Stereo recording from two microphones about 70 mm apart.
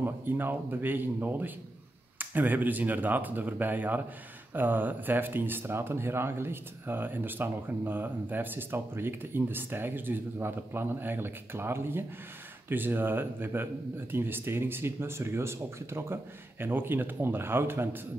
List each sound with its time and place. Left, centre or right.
0.0 s speech: right